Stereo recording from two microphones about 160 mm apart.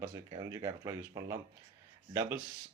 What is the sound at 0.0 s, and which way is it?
Speech, 25° right (ahead or behind).